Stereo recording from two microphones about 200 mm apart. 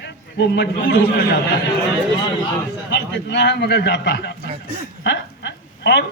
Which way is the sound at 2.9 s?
60° left (ahead or behind).